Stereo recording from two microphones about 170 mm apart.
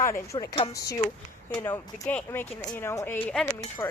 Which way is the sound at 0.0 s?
20° left (ahead or behind).